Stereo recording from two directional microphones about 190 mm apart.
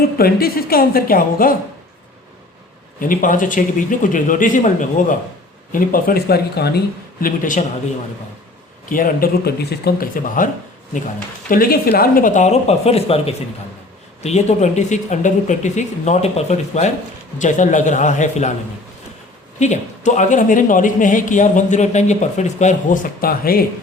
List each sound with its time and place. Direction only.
0.2 s speech: 50° left (ahead or behind)
3.0 s speech: 45° left (ahead or behind)
8.9 s speech: 50° left (ahead or behind)
19.5 s speech: 40° left (ahead or behind)